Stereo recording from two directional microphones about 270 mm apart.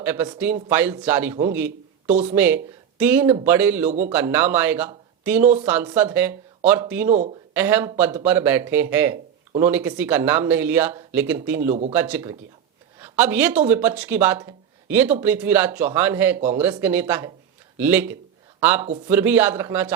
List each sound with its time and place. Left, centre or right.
0.0 s speech: centre
7.1 s speech: right
7.5 s a woman's voice: centre